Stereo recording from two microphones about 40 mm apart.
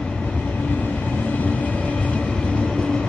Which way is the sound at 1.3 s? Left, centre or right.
Left.